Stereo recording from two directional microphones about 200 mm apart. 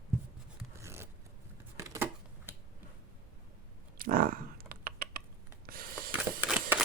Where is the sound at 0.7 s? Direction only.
15° right (ahead or behind).